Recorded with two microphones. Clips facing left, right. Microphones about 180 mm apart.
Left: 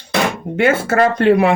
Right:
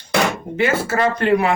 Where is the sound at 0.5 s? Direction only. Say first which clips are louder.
Left 6 dB; 60° left (ahead or behind).